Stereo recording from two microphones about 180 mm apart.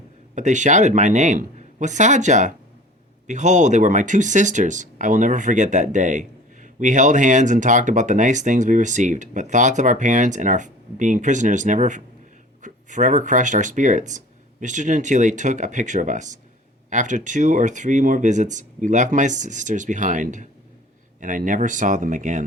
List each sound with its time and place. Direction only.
0.3 s speech: 40° right (ahead or behind)